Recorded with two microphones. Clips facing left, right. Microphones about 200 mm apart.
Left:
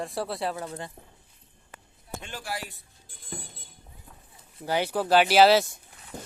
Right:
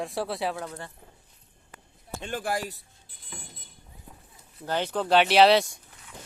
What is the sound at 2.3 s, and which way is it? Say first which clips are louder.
Speech: right 8 dB; 50° right (ahead or behind).